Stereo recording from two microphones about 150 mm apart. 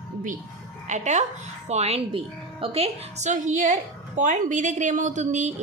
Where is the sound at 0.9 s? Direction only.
50° right (ahead or behind).